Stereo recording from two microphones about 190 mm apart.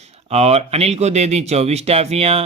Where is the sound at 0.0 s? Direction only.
35° right (ahead or behind).